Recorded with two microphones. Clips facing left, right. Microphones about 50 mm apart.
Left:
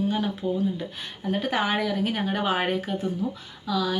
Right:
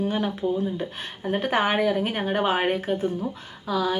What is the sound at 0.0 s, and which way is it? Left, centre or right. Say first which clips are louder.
Speech: right 1 dB; right.